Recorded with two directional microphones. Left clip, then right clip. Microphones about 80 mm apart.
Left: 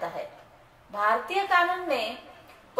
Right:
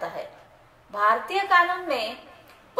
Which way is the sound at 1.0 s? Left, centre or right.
Right.